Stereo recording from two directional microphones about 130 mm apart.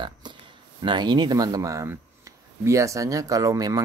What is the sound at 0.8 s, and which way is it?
Speech, 35° right (ahead or behind).